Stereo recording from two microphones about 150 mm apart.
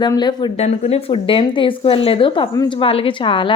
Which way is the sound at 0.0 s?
30° left (ahead or behind).